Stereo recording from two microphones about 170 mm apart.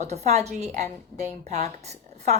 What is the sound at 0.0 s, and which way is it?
A woman's voice, 40° right (ahead or behind).